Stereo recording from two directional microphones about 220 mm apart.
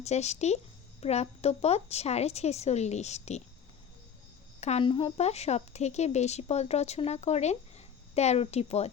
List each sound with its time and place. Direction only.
0.0 s a woman's voice: 30° left (ahead or behind)
4.6 s a woman's voice: 25° left (ahead or behind)